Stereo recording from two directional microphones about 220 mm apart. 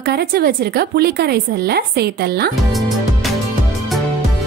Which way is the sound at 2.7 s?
Centre (ahead or behind).